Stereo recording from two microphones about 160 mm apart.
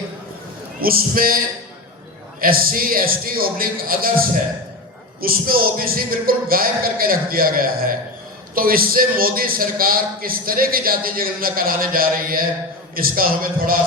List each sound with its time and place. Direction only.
0.8 s a man's voice: 65° right (ahead or behind)
2.4 s a man's voice: 65° right (ahead or behind)
5.2 s a man's voice: 65° right (ahead or behind)